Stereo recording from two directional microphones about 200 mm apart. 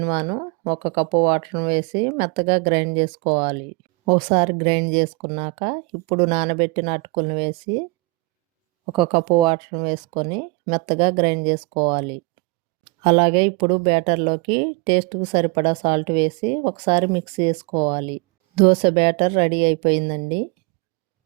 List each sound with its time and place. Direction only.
0.0 s speech: 25° right (ahead or behind)
8.9 s speech: 25° right (ahead or behind)